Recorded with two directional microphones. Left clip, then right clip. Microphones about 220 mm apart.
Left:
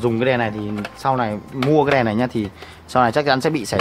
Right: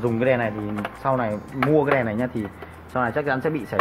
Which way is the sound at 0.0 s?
55° left (ahead or behind).